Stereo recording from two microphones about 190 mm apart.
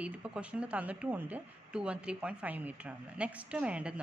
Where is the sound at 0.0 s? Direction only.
5° right (ahead or behind).